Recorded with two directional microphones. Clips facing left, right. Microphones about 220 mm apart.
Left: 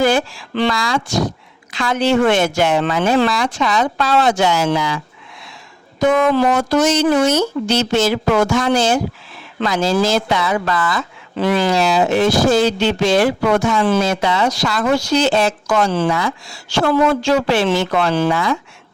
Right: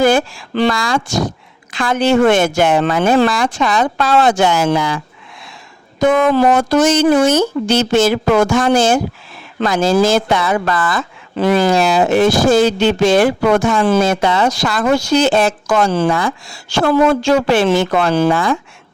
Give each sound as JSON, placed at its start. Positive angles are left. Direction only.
{"t": 0.0, "sound": "speech", "side_deg": -45}
{"t": 6.0, "sound": "speech", "side_deg": -50}